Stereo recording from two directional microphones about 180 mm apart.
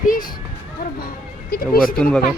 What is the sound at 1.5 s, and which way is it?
Speech, 55° left (ahead or behind).